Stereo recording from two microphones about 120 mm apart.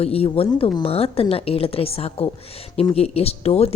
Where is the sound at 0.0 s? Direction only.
55° left (ahead or behind).